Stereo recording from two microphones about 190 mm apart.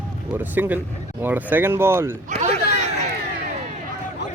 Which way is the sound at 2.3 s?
35° right (ahead or behind).